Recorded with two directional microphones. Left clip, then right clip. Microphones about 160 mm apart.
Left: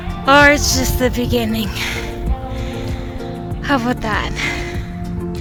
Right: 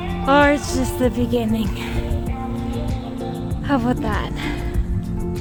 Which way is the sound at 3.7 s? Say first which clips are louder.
Left 4 dB; 15° right (ahead or behind).